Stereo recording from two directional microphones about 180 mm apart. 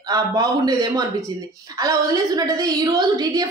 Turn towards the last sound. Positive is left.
turn(degrees=-20)  # may be behind; listen again after turning